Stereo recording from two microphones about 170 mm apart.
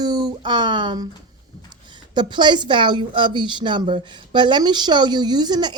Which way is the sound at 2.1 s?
25° right (ahead or behind).